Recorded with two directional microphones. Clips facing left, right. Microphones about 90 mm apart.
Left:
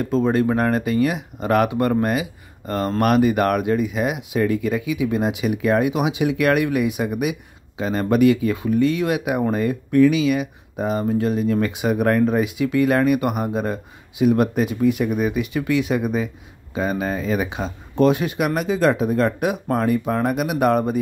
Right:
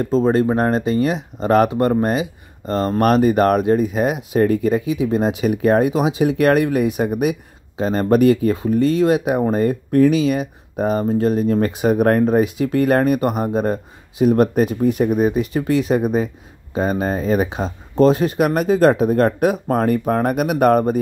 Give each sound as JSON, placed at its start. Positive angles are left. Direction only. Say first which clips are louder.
{"t": 0.0, "sound": "speech", "louder": "right 3 dB", "side_deg": -30}